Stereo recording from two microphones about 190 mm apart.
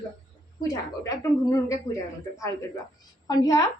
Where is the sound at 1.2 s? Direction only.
15° left (ahead or behind).